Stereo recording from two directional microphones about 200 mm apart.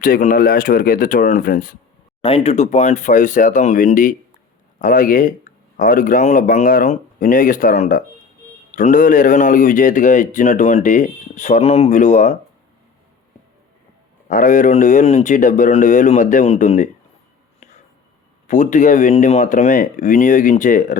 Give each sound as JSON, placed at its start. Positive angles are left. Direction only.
{"t": 0.0, "sound": "speech", "side_deg": 45}
{"t": 2.2, "sound": "speech", "side_deg": 30}
{"t": 14.3, "sound": "speech", "side_deg": 40}
{"t": 18.4, "sound": "speech", "side_deg": 40}